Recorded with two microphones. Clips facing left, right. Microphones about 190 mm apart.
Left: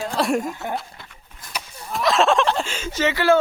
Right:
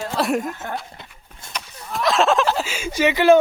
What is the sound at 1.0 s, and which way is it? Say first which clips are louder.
Dog: right 2 dB; 20° right (ahead or behind).